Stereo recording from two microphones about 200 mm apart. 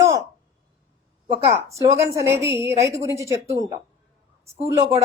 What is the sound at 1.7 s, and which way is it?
A woman's voice, 15° right (ahead or behind).